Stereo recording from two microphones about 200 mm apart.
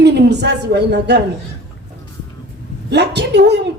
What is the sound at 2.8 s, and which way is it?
Speech, 60° right (ahead or behind).